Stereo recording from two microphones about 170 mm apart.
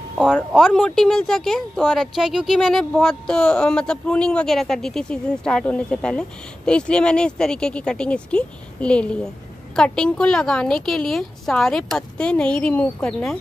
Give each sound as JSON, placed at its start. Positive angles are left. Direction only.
{"t": 0.5, "sound": "speech", "side_deg": 0}